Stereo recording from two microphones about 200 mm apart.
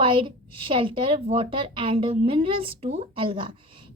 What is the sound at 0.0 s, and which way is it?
A woman's voice, 25° right (ahead or behind).